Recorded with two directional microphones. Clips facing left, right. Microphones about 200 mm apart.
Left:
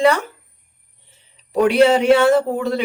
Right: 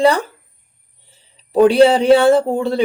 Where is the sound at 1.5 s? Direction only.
30° right (ahead or behind).